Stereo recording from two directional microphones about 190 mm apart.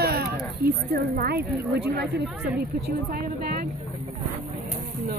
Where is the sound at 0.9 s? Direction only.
55° right (ahead or behind).